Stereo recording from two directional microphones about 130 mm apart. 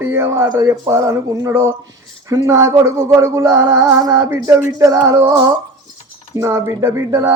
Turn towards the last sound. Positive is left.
turn(degrees=-20)  # may be behind; listen again after turning